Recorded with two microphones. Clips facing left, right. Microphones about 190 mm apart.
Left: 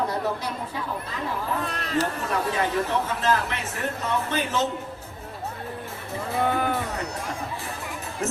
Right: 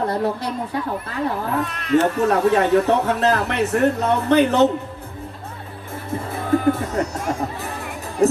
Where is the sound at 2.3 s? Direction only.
70° right (ahead or behind).